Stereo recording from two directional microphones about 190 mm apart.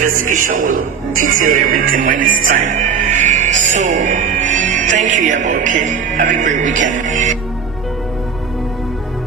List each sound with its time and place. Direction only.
0.0 s speech: 45° right (ahead or behind)